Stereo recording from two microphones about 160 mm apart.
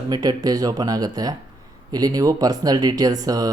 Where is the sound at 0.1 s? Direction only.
25° right (ahead or behind).